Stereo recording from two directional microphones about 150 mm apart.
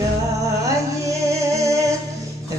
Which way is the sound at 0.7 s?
20° right (ahead or behind).